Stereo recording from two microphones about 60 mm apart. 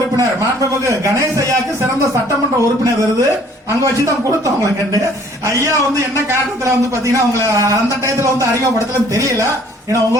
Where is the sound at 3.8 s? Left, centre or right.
Right.